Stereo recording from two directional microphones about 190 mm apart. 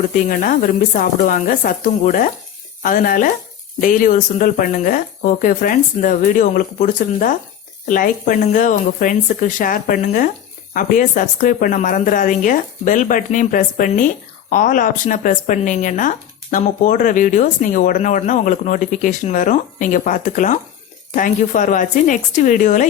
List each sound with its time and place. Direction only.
0.3 s speech: 45° left (ahead or behind)